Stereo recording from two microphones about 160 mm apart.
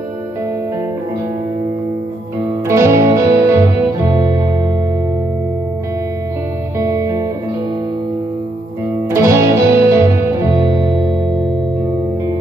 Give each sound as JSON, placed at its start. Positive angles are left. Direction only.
{"t": 2.7, "sound": "music", "side_deg": -15}
{"t": 6.8, "sound": "music", "side_deg": -20}
{"t": 9.1, "sound": "music", "side_deg": -15}